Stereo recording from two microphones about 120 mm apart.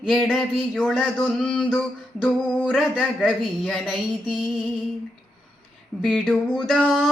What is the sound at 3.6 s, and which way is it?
Speech, centre (ahead or behind).